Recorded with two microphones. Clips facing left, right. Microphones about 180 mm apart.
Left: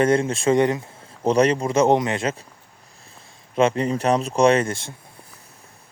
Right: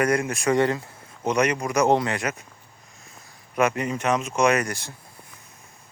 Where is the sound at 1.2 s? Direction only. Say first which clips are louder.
Left 5 dB; 30° left (ahead or behind).